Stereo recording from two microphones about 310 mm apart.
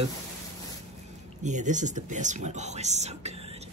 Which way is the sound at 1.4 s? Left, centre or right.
Right.